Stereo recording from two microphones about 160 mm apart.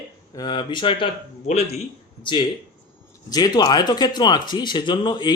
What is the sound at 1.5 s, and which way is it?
Speech, 45° left (ahead or behind).